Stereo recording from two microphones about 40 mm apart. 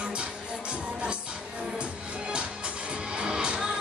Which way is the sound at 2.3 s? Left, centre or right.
Right.